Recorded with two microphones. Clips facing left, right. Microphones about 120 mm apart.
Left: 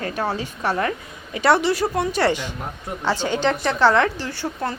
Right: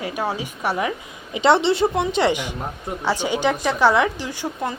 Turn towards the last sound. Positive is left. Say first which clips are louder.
# even
turn(degrees=-15)  # may be behind; listen again after turning